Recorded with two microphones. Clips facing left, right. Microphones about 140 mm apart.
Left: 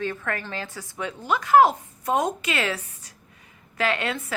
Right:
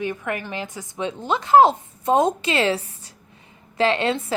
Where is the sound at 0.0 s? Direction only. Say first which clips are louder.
Right 2 dB; 15° right (ahead or behind).